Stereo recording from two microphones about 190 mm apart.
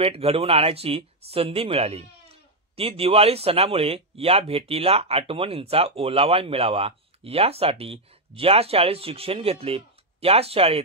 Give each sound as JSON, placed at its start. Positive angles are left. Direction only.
{"t": 0.0, "sound": "speech", "side_deg": -30}